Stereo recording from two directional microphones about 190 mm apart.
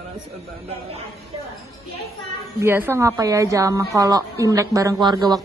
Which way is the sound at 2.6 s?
10° right (ahead or behind).